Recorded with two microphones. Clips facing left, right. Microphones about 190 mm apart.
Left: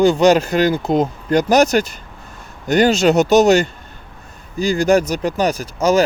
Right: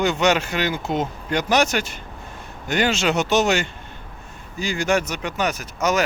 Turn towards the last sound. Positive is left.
turn(degrees=30)  # may be behind; listen again after turning